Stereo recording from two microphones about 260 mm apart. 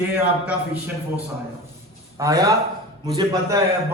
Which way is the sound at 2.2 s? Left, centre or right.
Centre.